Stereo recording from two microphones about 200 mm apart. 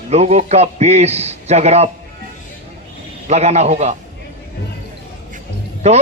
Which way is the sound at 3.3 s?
35° right (ahead or behind).